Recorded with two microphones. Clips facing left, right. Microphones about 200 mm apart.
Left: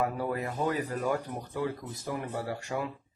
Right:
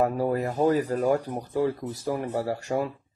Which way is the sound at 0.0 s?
40° right (ahead or behind).